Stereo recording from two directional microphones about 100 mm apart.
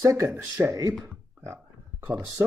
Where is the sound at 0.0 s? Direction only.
30° right (ahead or behind).